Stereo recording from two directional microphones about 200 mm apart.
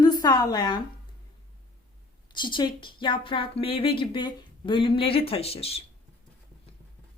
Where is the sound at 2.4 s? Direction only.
25° left (ahead or behind).